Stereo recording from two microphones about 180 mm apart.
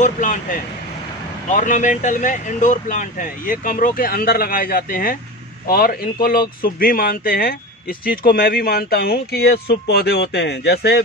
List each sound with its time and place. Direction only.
0.0 s speech: 45° left (ahead or behind); by 11.0 s 65° left (ahead or behind)